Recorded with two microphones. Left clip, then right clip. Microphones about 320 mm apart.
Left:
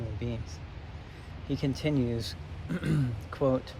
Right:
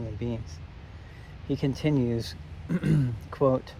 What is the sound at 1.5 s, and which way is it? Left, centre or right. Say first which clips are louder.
Speech: right 3 dB; centre.